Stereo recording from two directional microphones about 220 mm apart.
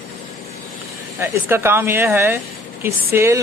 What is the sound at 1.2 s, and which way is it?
Speech, 10° right (ahead or behind).